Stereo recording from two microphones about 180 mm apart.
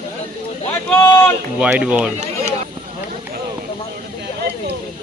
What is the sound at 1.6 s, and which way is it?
Speech, 5° right (ahead or behind).